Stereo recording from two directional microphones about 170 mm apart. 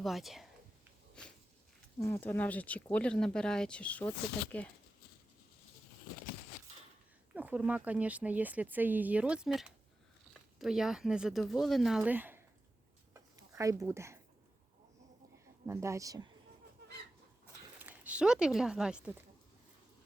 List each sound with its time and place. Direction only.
0.0 s speech: centre (ahead or behind)
1.2 s walk: 5° left (ahead or behind)
2.0 s speech: 15° left (ahead or behind)
7.3 s speech: 10° right (ahead or behind)
13.1 s a sound: 20° right (ahead or behind)
15.6 s speech: 15° right (ahead or behind)
17.7 s speech: 10° right (ahead or behind)